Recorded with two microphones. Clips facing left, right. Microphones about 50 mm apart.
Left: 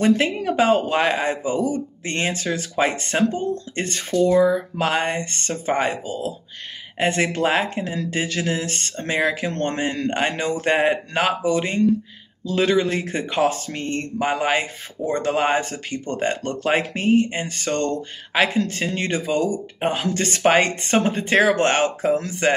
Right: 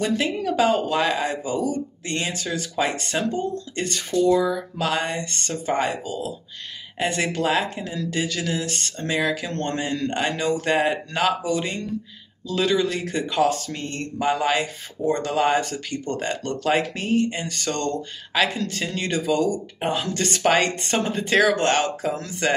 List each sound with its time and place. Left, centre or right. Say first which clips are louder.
0.0 s speech: left 4 dB; left